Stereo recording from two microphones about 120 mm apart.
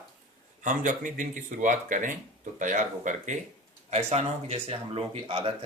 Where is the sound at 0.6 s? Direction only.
90° right.